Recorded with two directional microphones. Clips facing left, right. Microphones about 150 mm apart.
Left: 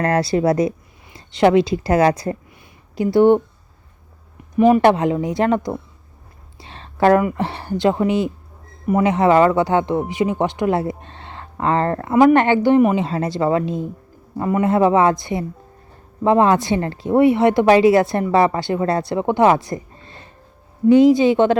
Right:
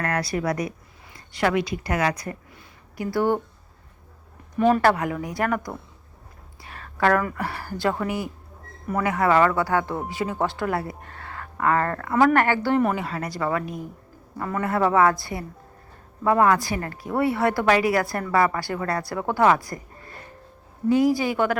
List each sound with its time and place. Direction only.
0.0 s speech: 30° left (ahead or behind)
4.5 s speech: 10° left (ahead or behind)